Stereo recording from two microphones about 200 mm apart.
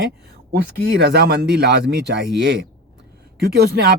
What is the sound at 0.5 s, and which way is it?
Speech, 60° right (ahead or behind).